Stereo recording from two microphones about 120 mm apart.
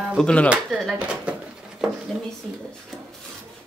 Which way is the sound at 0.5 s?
5° right (ahead or behind).